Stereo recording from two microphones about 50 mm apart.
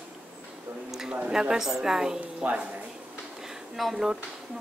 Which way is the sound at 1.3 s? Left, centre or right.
Centre.